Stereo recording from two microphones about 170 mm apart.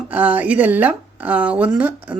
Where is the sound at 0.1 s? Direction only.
10° right (ahead or behind).